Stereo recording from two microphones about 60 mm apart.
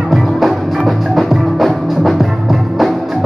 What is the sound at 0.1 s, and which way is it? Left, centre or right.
Music, centre.